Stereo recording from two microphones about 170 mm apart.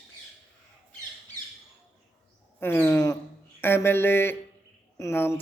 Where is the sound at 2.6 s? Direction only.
15° left (ahead or behind).